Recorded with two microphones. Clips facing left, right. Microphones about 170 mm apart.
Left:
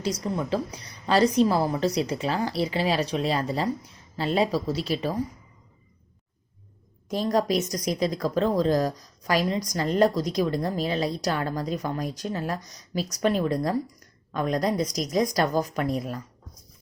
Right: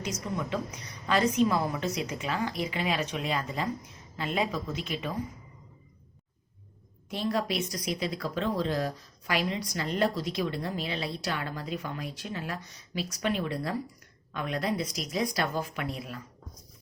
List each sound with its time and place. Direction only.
0.0 s a woman's voice: 35° left (ahead or behind)
7.1 s a woman's voice: 40° left (ahead or behind)